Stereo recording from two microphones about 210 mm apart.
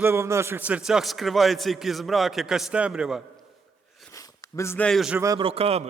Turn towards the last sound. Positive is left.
turn(degrees=-30)  # may be behind; listen again after turning